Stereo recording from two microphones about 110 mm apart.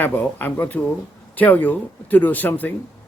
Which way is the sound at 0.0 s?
15° left (ahead or behind).